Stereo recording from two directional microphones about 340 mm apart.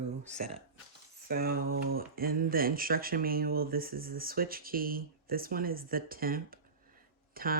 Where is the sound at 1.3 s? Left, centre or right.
Right.